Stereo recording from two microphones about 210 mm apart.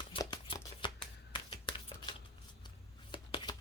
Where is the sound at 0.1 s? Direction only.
20° left (ahead or behind).